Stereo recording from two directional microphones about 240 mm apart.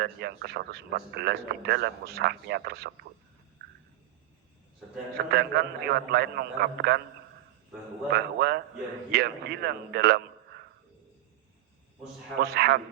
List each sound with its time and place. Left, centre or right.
0.0 s speech: right
5.3 s speech: right
8.1 s speech: right
12.4 s a man's voice: right